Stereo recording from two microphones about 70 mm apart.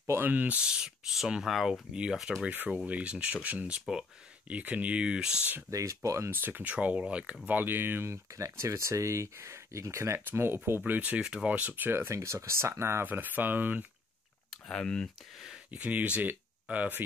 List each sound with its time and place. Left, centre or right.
0.2 s speech: right
2.4 s speech: right
5.7 s speech: right
6.3 s speech: right
7.4 s speech: right
10.9 s speech: right
11.9 s speech: right
14.7 s speech: centre
15.7 s speech: right